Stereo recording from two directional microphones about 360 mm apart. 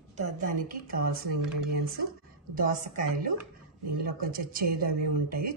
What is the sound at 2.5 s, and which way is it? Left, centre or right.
Speech, right.